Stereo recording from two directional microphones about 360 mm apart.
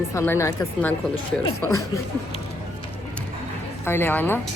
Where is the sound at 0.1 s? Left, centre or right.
Centre.